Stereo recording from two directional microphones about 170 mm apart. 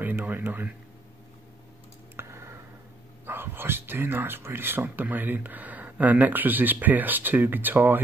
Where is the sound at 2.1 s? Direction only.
15° right (ahead or behind).